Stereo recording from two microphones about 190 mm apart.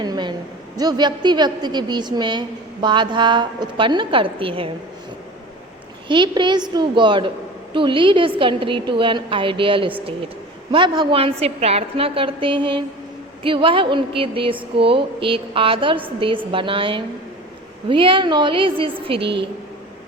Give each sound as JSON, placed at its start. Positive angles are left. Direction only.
{"t": 0.0, "sound": "a woman's voice", "side_deg": -20}
{"t": 6.1, "sound": "a woman's voice", "side_deg": -25}